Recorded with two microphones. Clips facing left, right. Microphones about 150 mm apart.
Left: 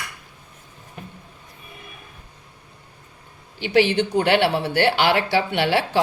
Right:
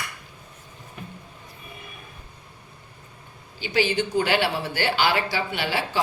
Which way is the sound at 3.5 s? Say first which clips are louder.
Left 5 dB; 70° left (ahead or behind).